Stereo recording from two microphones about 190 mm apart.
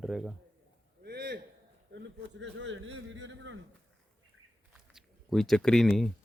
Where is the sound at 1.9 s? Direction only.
70° right (ahead or behind).